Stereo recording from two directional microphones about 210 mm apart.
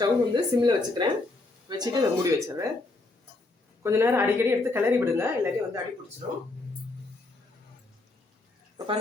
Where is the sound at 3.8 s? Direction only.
10° right (ahead or behind).